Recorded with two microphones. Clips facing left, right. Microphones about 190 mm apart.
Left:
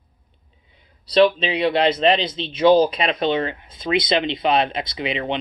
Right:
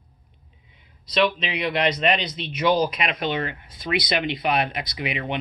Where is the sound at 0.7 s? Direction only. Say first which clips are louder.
Left 7 dB; 35° left (ahead or behind).